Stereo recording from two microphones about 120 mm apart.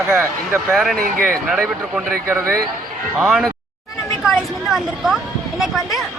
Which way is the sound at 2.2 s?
20° right (ahead or behind).